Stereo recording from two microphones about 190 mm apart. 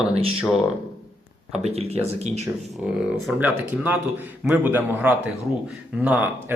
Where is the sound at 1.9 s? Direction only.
35° right (ahead or behind).